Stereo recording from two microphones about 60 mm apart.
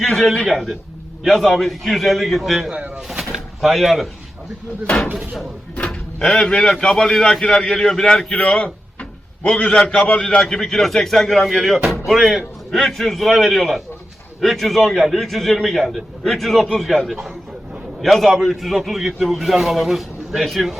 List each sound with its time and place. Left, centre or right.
0.0 s a man's voice: centre
2.7 s speech: right
3.6 s a man's voice: centre
5.9 s a man's voice: centre
17.1 s a man's voice: centre